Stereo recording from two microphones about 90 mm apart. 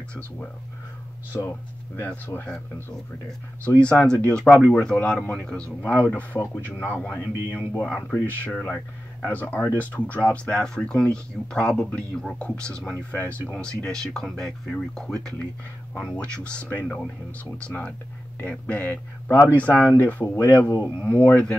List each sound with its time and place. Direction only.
1.3 s speech: 25° left (ahead or behind)
3.7 s speech: 10° left (ahead or behind)